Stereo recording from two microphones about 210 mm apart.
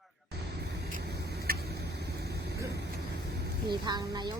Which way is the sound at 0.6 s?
50° right (ahead or behind).